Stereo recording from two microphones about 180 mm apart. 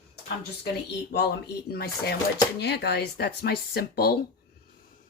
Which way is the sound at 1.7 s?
60° left (ahead or behind).